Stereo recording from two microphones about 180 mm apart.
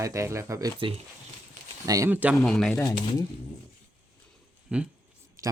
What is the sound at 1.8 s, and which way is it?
Speech, 20° right (ahead or behind).